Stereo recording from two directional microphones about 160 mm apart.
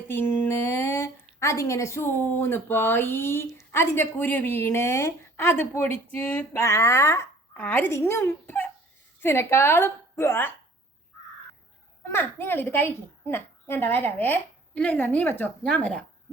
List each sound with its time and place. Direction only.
0.1 s a sound: 15° left (ahead or behind)
1.4 s speech: 20° left (ahead or behind)
12.1 s speech: 15° left (ahead or behind)